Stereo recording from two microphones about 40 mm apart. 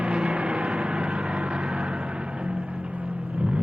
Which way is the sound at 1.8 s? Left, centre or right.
Right.